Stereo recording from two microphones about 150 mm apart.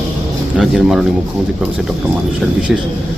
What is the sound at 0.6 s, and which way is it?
Speech, centre (ahead or behind).